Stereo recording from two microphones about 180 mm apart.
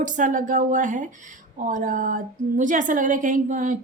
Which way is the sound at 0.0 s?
45° right (ahead or behind).